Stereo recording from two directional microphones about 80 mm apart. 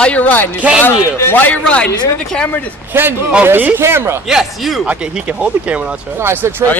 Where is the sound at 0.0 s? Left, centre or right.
Centre.